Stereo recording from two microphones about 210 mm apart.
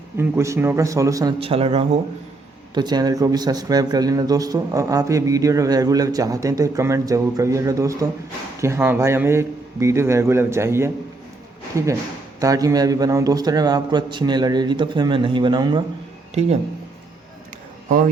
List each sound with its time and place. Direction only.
0.2 s a man's voice: 15° right (ahead or behind)
1.4 s a man's voice: 25° right (ahead or behind)
16.3 s speech: 30° right (ahead or behind)